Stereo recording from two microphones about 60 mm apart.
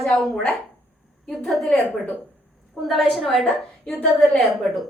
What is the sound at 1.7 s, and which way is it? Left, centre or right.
Speech, left.